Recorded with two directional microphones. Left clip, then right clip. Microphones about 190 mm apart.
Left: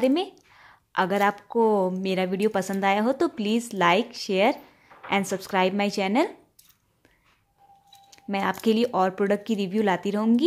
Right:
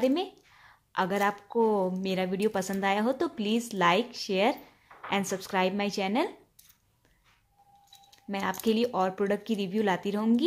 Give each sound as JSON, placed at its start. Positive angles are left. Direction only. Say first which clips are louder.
{"t": 0.0, "sound": "a woman's voice", "louder": "left 4 dB", "side_deg": 15}
{"t": 8.1, "sound": "speech", "louder": "left 5 dB", "side_deg": 20}